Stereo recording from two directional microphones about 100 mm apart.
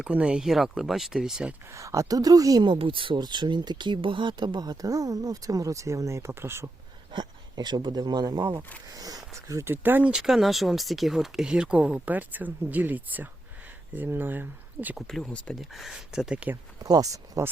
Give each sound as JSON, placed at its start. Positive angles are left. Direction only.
{"t": 0.0, "sound": "speech", "side_deg": -10}
{"t": 1.7, "sound": "speech", "side_deg": -30}
{"t": 2.6, "sound": "speech", "side_deg": -60}
{"t": 7.1, "sound": "speech", "side_deg": -45}
{"t": 14.9, "sound": "speech", "side_deg": 5}
{"t": 15.7, "sound": "speech", "side_deg": -5}
{"t": 16.8, "sound": "speech", "side_deg": -35}